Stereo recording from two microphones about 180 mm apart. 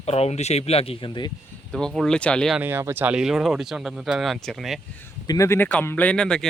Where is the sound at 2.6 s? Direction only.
15° right (ahead or behind).